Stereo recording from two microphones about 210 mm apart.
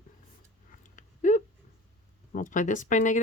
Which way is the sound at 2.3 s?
40° left (ahead or behind).